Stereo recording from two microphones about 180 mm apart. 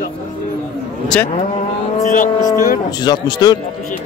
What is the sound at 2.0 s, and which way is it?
Speech, 50° left (ahead or behind).